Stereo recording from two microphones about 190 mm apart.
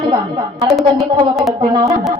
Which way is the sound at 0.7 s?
Centre (ahead or behind).